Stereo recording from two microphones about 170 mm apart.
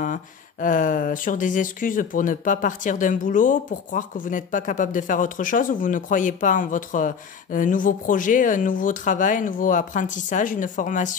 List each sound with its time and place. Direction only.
0.0 s speech: 50° left (ahead or behind)